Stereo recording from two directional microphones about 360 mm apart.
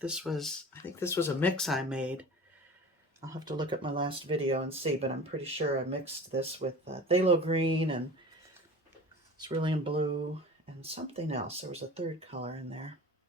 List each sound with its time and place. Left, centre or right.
0.0 s speech: centre
9.4 s speech: centre